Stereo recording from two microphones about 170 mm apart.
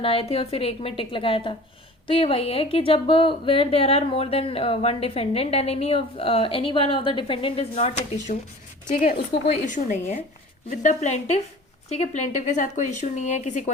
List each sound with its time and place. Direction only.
0.0 s a woman's voice: 35° left (ahead or behind)